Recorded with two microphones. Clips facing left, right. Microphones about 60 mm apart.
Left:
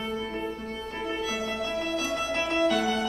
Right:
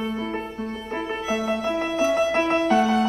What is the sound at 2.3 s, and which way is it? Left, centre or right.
Music, right.